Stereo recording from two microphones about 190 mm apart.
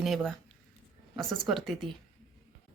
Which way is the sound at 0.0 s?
Centre (ahead or behind).